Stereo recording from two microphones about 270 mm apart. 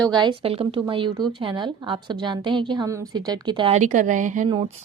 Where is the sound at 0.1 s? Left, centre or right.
Centre.